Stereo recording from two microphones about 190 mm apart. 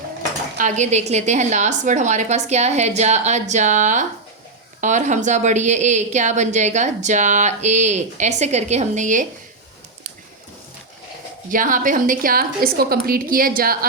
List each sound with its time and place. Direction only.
0.5 s a woman's voice: 40° right (ahead or behind)
11.5 s a woman's voice: 45° right (ahead or behind)